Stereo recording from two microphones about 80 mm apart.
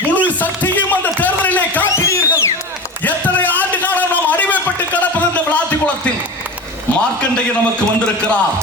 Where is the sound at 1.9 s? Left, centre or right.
Left.